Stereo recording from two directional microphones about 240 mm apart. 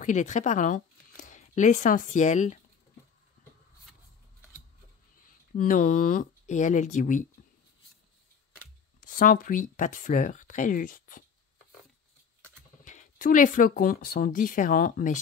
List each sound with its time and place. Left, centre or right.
0.0 s speech: left
5.2 s speech: left
9.0 s speech: left
12.8 s speech: left